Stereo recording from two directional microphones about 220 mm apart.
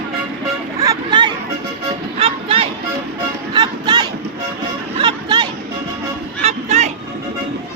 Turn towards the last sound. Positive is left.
turn(degrees=-30)  # may be behind; listen again after turning